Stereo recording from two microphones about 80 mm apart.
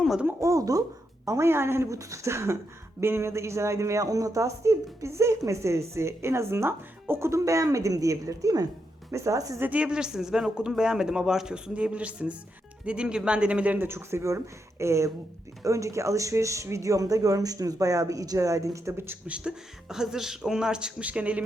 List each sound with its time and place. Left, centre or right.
0.3 s a woman's voice: right
9.6 s a man's voice: centre
13.7 s a woman's voice: right
19.3 s a man's voice: centre